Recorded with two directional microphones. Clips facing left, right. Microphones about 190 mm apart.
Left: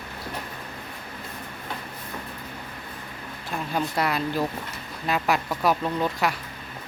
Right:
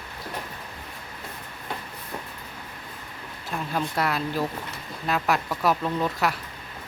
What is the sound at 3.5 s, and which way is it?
Speech, centre (ahead or behind).